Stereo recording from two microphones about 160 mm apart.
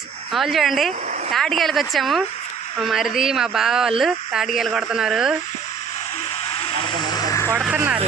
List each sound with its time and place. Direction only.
0.3 s speech: centre (ahead or behind)
6.5 s vehicle: 35° left (ahead or behind); by 7.5 s 20° left (ahead or behind)